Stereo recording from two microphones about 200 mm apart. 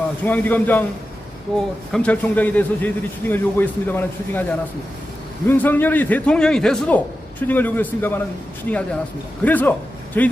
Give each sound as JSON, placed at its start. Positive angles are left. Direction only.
{"t": 0.3, "sound": "a man's voice", "side_deg": 10}
{"t": 5.5, "sound": "a man's voice", "side_deg": 10}